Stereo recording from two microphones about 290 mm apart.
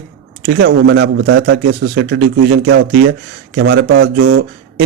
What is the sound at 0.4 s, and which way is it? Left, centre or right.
Speech, right.